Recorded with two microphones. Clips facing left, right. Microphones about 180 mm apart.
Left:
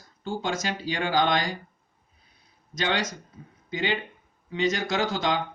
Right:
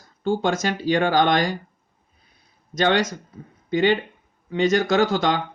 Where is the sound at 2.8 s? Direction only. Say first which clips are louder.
Right 8 dB; 55° right (ahead or behind).